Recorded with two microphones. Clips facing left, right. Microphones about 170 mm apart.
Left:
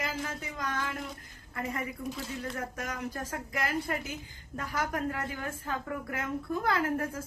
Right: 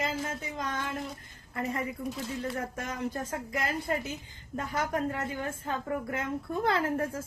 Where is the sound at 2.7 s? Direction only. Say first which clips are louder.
Right 2 dB; 25° right (ahead or behind).